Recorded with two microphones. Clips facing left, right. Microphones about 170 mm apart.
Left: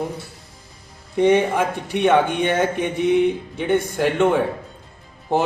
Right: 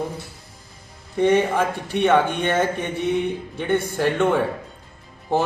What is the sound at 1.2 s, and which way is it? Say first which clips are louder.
A man's voice: left 1 dB; 15° left (ahead or behind).